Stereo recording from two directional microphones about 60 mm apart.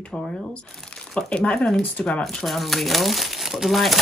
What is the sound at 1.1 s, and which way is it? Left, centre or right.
Speech, centre.